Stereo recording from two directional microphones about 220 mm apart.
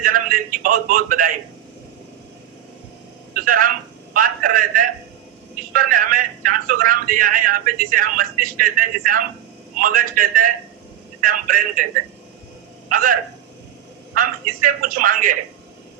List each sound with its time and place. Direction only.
0.0 s speech: 40° right (ahead or behind)
3.3 s speech: 40° right (ahead or behind)
12.9 s a man's voice: 40° right (ahead or behind)
14.2 s speech: 40° right (ahead or behind)